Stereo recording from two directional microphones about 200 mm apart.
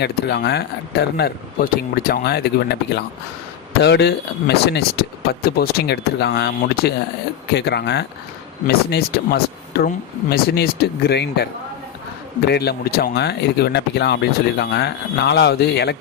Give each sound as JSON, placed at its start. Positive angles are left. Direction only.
{"t": 0.0, "sound": "speech", "side_deg": 55}
{"t": 12.5, "sound": "speech", "side_deg": 55}